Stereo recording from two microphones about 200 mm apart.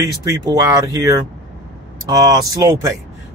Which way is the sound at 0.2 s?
20° right (ahead or behind).